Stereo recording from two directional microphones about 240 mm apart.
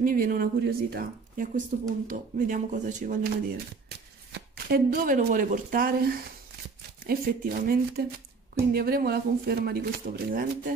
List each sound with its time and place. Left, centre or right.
0.0 s speech: right